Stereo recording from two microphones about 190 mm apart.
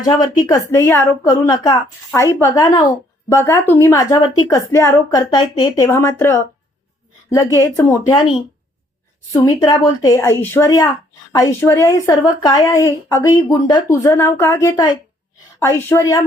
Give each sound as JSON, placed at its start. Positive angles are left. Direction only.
{"t": 0.0, "sound": "a woman's voice", "side_deg": 20}
{"t": 5.8, "sound": "a woman's voice", "side_deg": 15}